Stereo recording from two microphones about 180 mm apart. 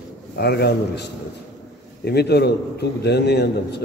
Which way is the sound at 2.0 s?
65° left (ahead or behind).